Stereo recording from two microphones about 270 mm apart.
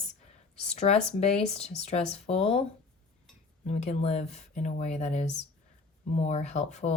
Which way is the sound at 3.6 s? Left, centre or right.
Left.